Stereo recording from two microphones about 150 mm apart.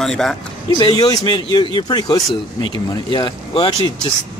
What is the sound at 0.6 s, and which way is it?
Speech, 30° left (ahead or behind).